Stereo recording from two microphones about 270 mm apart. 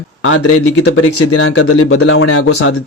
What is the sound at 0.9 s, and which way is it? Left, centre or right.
Speech, left.